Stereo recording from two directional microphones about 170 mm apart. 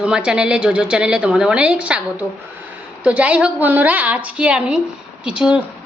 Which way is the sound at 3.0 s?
5° right (ahead or behind).